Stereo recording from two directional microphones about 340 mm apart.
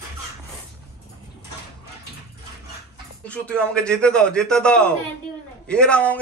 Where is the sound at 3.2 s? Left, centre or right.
Centre.